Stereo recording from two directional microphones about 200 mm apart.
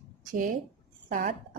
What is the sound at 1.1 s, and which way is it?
Speech, 40° right (ahead or behind).